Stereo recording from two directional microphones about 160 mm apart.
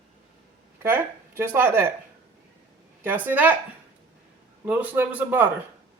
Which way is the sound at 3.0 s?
10° right (ahead or behind).